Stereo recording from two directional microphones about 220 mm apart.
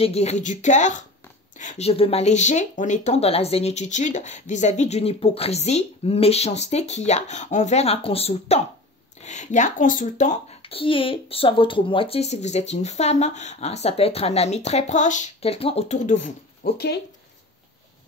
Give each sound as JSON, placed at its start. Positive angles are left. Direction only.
{"t": 0.0, "sound": "speech", "side_deg": 30}